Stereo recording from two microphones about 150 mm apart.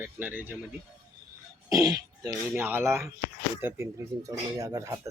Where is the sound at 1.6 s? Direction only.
25° right (ahead or behind).